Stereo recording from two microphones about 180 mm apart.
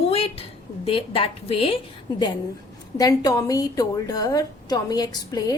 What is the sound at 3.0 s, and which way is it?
A woman's voice, 20° left (ahead or behind).